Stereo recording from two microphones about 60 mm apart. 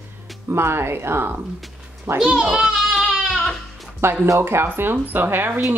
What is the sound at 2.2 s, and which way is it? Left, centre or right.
Goat, centre.